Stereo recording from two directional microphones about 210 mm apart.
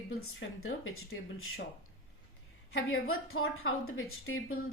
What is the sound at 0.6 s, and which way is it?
Speech, 80° left.